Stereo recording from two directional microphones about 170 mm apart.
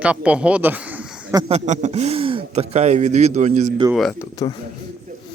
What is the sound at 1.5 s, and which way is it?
Speech, 40° right (ahead or behind).